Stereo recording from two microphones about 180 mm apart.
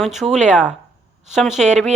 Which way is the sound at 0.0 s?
Centre (ahead or behind).